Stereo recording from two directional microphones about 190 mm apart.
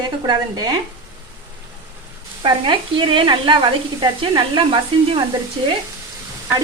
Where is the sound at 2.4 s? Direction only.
25° right (ahead or behind).